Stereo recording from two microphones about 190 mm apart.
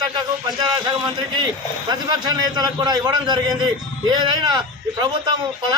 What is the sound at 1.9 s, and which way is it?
A man's voice, 20° right (ahead or behind).